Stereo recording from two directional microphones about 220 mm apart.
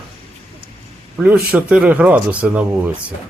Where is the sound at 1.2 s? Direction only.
5° right (ahead or behind).